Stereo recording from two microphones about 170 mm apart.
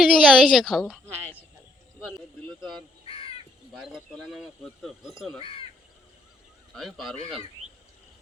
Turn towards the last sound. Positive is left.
turn(degrees=0)  # may be behind; listen again after turning